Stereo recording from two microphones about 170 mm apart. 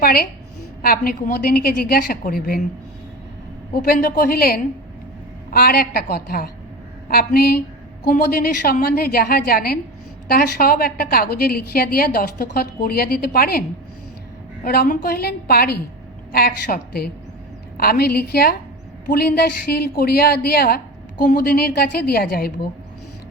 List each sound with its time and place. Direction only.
0.0 s a woman's voice: 65° left (ahead or behind)
3.8 s a woman's voice: 60° left (ahead or behind)